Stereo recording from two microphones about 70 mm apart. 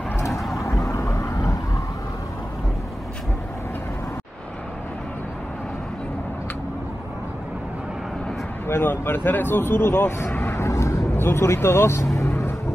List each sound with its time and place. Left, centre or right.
0.3 s vehicle: centre
0.7 s vehicle: left
8.6 s speech: left